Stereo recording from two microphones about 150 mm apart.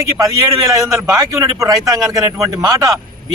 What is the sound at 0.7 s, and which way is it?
A man's voice, 25° right (ahead or behind).